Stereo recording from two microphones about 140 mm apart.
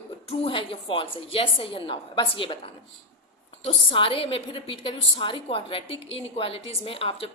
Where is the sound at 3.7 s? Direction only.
40° left (ahead or behind).